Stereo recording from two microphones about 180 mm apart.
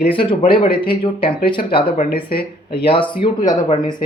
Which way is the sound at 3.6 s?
30° left (ahead or behind).